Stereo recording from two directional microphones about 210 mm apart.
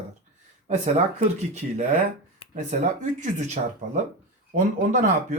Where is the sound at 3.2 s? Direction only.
35° right (ahead or behind).